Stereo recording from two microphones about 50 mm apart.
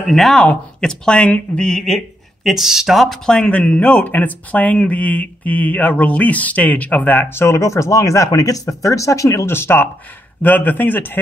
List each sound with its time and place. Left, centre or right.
0.1 s speech: centre
1.2 s speech: left
1.6 s speech: centre
2.5 s speech: centre
3.4 s speech: left
3.8 s speech: left
7.2 s speech: left
9.5 s speech: left
10.4 s speech: left